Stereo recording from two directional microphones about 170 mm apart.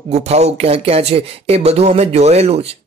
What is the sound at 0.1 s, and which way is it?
Speech, 40° right (ahead or behind).